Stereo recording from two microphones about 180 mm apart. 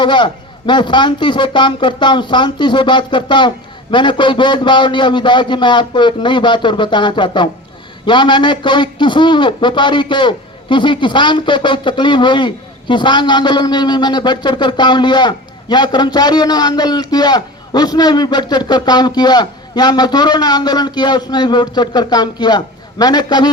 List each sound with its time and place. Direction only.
0.0 s a man's voice: 25° left (ahead or behind)